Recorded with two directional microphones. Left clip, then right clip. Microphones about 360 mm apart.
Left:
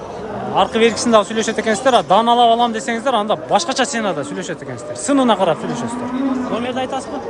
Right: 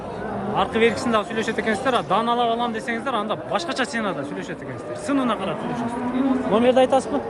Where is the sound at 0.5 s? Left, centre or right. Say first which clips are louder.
Left 6 dB; centre.